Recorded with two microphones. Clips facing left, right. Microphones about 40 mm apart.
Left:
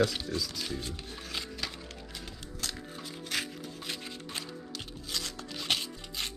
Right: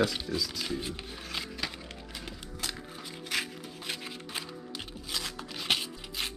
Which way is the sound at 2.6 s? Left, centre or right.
Centre.